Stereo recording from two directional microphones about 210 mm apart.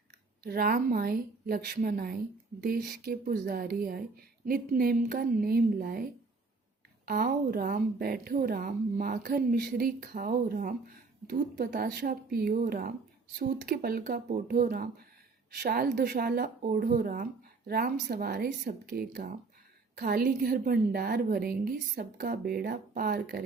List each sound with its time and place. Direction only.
0.4 s a woman's voice: 45° right (ahead or behind)